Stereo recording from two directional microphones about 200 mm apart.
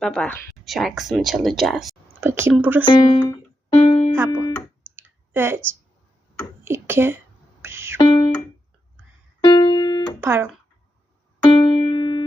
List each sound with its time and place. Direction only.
0.0 s speech: 5° left (ahead or behind)
2.2 s speech: 10° right (ahead or behind)
2.8 s music: 20° left (ahead or behind)
3.8 s music: 30° left (ahead or behind)
4.9 s clicking: 10° right (ahead or behind)
6.7 s speech: 10° right (ahead or behind)
7.6 s music: 10° right (ahead or behind)
7.9 s music: 25° left (ahead or behind)
9.4 s music: 20° left (ahead or behind)
10.2 s speech: 10° right (ahead or behind)
11.4 s music: 25° left (ahead or behind)